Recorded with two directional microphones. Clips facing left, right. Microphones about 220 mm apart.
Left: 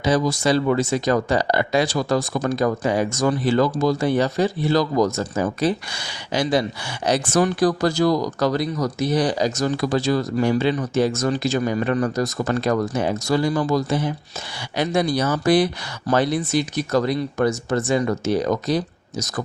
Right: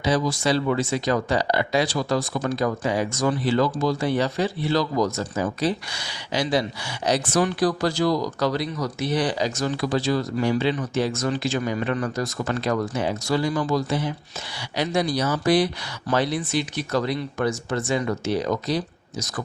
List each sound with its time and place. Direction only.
0.0 s speech: 45° left (ahead or behind)